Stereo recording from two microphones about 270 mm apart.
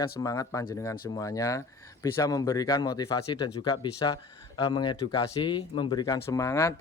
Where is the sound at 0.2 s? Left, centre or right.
Centre.